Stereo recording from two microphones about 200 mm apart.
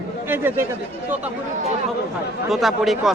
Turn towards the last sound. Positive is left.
turn(degrees=0)  # may be behind; listen again after turning